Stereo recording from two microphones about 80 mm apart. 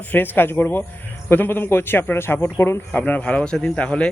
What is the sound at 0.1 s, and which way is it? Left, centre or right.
A man's voice, left.